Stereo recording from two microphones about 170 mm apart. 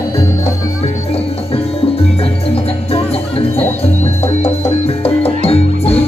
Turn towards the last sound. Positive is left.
turn(degrees=35)  # may be behind; listen again after turning